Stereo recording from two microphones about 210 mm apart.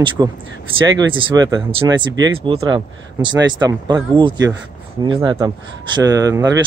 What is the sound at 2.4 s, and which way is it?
Speech, 20° right (ahead or behind).